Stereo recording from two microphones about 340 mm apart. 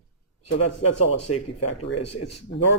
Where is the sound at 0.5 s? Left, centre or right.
Left.